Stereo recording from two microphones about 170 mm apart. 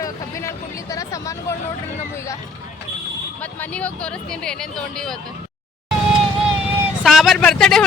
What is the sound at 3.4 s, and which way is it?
Speech, 10° left (ahead or behind).